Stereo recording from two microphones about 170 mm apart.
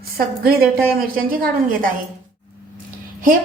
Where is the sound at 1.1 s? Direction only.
60° right (ahead or behind).